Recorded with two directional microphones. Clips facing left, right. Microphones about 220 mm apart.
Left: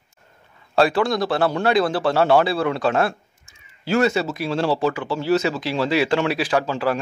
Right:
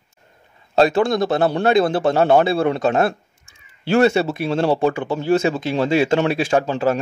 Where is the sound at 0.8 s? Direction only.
25° right (ahead or behind).